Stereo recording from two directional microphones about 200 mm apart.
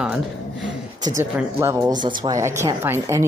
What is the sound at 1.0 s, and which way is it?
Speech, 15° right (ahead or behind).